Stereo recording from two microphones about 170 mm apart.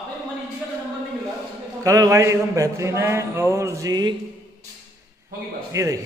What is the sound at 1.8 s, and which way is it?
A man's voice, 20° right (ahead or behind).